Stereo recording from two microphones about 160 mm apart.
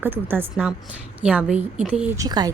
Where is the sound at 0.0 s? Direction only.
15° right (ahead or behind).